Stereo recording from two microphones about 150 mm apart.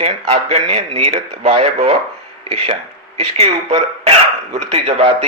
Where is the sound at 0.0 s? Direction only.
40° right (ahead or behind).